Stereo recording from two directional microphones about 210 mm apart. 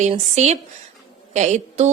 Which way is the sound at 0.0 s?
35° right (ahead or behind).